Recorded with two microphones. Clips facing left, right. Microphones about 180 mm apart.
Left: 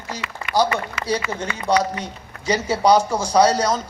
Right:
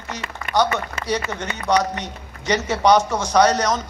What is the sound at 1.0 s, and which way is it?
Speech, 30° left (ahead or behind).